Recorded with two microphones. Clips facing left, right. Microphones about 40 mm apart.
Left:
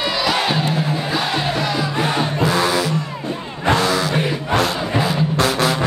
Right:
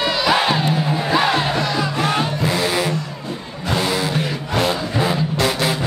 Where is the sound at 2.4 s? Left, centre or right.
Left.